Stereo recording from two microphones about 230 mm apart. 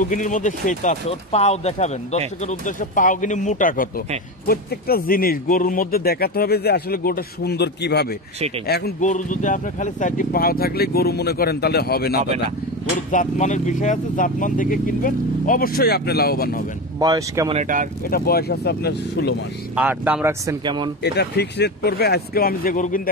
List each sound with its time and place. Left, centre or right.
0.0 s speech: left
13.1 s speech: left
17.0 s speech: centre
17.6 s speech: right
18.0 s speech: left
19.7 s speech: centre
21.0 s speech: left